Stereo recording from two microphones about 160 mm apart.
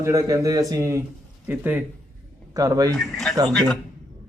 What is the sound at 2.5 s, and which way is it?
Speech, 20° right (ahead or behind).